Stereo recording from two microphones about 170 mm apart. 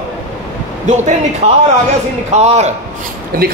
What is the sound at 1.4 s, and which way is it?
A man's voice, 35° right (ahead or behind).